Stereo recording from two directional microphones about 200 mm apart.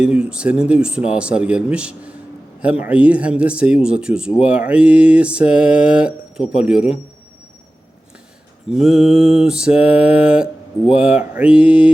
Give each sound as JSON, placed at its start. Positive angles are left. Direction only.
{"t": 0.0, "sound": "mantra", "side_deg": -5}
{"t": 2.6, "sound": "speech", "side_deg": -5}
{"t": 3.8, "sound": "mantra", "side_deg": -5}
{"t": 8.7, "sound": "mantra", "side_deg": 0}